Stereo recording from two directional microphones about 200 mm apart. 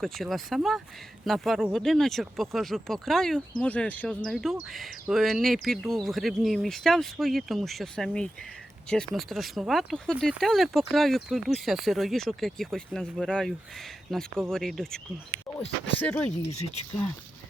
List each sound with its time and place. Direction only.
0.0 s speech: centre (ahead or behind)
15.5 s a sound: 10° left (ahead or behind)
16.0 s speech: 10° left (ahead or behind)
16.5 s speech: 35° left (ahead or behind)